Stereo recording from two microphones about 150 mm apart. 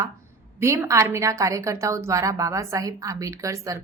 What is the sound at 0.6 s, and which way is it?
A woman's voice, 20° right (ahead or behind).